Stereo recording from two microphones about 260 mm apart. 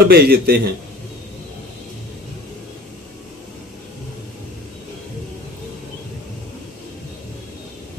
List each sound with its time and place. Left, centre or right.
0.0 s a man's voice: right